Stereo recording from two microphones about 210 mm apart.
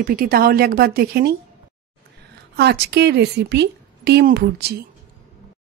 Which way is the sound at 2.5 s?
50° right (ahead or behind).